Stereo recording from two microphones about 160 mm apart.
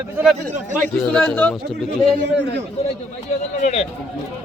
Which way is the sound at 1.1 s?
5° left (ahead or behind).